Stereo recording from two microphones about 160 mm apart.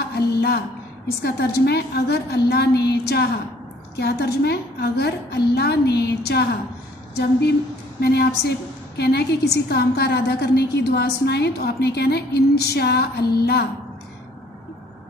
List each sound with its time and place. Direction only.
0.1 s a sound: 80° left
1.2 s a woman's voice: 90° left
8.0 s a woman's voice: 90° left